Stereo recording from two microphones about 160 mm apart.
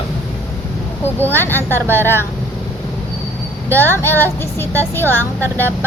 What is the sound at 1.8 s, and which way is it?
Speech, 15° right (ahead or behind).